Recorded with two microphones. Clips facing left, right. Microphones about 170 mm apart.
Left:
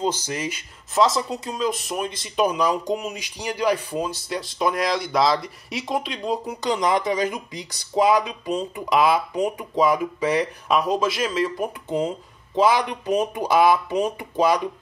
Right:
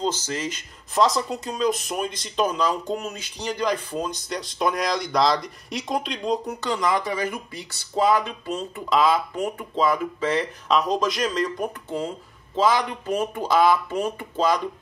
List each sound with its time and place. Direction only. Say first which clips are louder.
0.0 s speech: left 1 dB; 15° left (ahead or behind)
6.6 s speech: left 6 dB; 20° left (ahead or behind)